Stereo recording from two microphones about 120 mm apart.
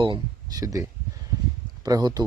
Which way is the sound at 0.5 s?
30° right (ahead or behind).